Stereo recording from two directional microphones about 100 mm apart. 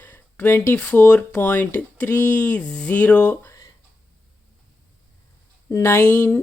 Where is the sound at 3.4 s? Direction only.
30° left (ahead or behind).